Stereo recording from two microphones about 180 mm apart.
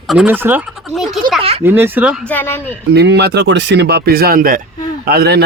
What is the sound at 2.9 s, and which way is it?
A man's voice, 65° right (ahead or behind).